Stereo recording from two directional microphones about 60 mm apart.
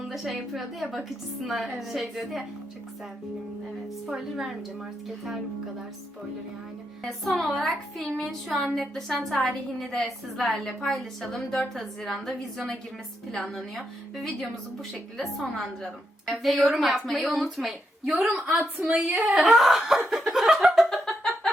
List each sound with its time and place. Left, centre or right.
0.1 s a woman's voice: centre
4.0 s a woman's voice: centre
7.3 s a woman's voice: centre
18.9 s a woman's voice: right
19.5 s a woman's voice: centre
20.1 s a sound: centre